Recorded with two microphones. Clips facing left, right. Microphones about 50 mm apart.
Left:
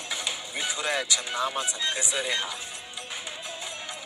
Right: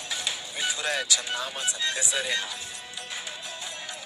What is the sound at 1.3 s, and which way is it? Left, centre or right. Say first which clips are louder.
Speech: left 5 dB; left.